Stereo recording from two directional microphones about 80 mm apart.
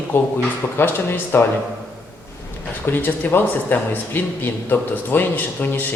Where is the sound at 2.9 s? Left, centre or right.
Left.